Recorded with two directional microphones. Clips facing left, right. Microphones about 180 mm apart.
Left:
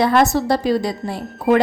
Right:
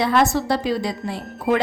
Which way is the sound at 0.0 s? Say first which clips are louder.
Left 3 dB; 45° left (ahead or behind).